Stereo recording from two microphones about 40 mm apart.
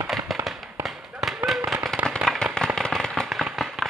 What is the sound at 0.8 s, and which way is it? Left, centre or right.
Firecracker, centre.